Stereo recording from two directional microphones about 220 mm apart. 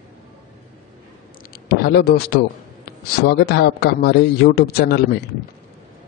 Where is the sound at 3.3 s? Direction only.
45° left (ahead or behind).